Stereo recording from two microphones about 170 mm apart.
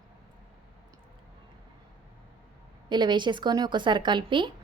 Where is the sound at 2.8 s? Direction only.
25° right (ahead or behind).